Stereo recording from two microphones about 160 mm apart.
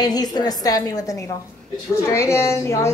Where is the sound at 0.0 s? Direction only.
25° left (ahead or behind).